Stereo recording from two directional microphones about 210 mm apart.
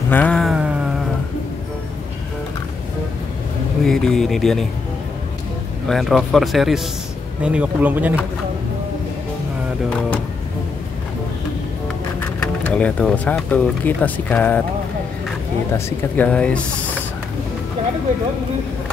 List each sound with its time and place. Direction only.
0.1 s a sound: 5° left (ahead or behind)
3.8 s speech: centre (ahead or behind)
5.9 s speech: centre (ahead or behind)
12.4 s speech: 5° left (ahead or behind)
15.7 s speech: 10° left (ahead or behind)